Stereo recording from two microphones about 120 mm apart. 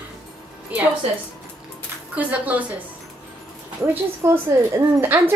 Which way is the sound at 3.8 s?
20° right (ahead or behind).